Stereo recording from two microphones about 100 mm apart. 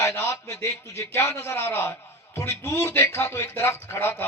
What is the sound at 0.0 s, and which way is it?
A man's voice, 30° left (ahead or behind).